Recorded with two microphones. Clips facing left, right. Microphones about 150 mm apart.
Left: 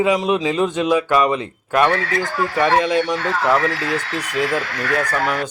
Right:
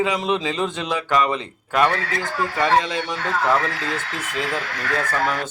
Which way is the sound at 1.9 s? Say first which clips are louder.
Left 4 dB; 90° left.